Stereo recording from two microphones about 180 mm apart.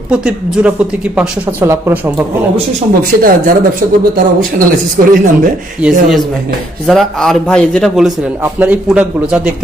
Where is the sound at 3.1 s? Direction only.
55° right (ahead or behind).